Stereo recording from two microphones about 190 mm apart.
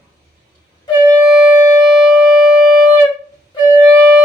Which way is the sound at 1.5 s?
15° right (ahead or behind).